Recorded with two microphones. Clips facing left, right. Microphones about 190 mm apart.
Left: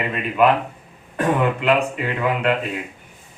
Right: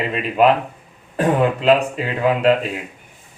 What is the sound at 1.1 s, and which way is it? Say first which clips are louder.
Speech: right 2 dB; 30° right (ahead or behind).